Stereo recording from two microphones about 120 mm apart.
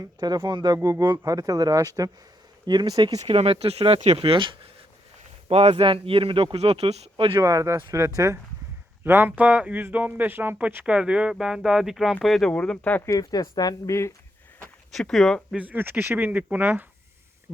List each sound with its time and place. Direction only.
0.0 s speech: 35° right (ahead or behind)
0.8 s speech: 25° right (ahead or behind)
3.2 s speech: 55° right (ahead or behind)
5.5 s speech: 55° right (ahead or behind)
7.3 s speech: 25° right (ahead or behind)
9.0 s speech: 15° right (ahead or behind); by 13.0 s 10° left (ahead or behind)
13.1 s speech: 30° left (ahead or behind)
14.9 s speech: centre (ahead or behind)
15.5 s speech: 15° right (ahead or behind)